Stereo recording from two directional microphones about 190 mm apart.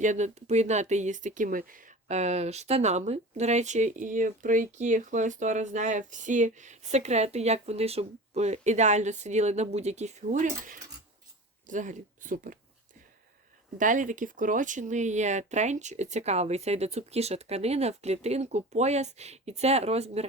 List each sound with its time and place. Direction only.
0.0 s speech: 40° right (ahead or behind)
13.7 s speech: 40° right (ahead or behind)